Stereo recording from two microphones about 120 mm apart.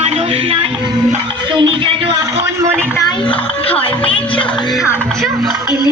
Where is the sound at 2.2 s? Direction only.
20° right (ahead or behind).